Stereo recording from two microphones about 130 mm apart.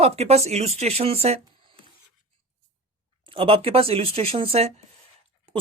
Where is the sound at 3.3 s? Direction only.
45° right (ahead or behind).